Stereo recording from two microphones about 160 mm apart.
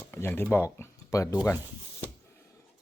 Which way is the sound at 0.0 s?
15° left (ahead or behind).